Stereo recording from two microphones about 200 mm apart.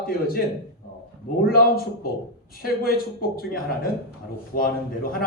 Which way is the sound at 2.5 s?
50° left (ahead or behind).